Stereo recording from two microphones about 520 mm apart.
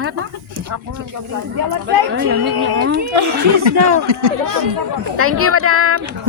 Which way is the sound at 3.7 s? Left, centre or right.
Right.